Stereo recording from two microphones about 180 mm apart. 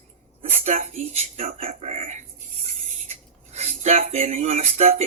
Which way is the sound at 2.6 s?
35° right (ahead or behind).